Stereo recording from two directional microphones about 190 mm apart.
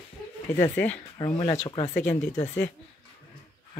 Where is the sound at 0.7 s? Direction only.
5° left (ahead or behind).